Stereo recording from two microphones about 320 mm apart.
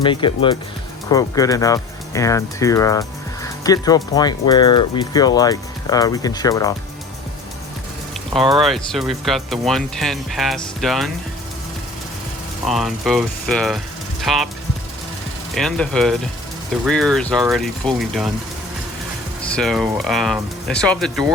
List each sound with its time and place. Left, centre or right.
0.0 s speech: centre
8.6 s speech: centre
12.6 s speech: centre
15.5 s speech: centre
19.5 s speech: centre